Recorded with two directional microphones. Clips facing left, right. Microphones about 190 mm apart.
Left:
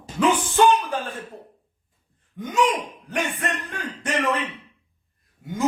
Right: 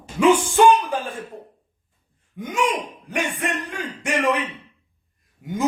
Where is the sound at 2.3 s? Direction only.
15° right (ahead or behind).